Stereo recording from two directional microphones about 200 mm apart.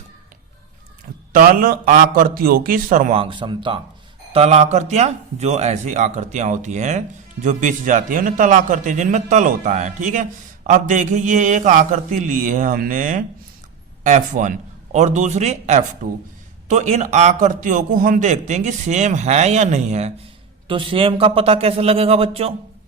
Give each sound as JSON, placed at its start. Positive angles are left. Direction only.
{"t": 1.3, "sound": "a man's voice", "side_deg": -45}
{"t": 3.2, "sound": "a man's voice", "side_deg": -25}